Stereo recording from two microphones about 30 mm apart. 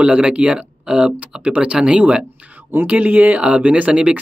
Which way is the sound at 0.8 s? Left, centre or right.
Right.